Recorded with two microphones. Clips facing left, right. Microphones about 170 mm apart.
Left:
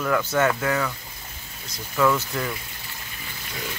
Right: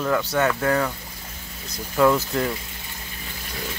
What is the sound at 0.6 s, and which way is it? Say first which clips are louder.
Speech: right 3 dB; 35° right (ahead or behind).